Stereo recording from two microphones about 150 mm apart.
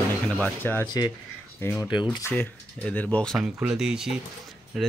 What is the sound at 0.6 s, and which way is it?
Speech, 15° left (ahead or behind).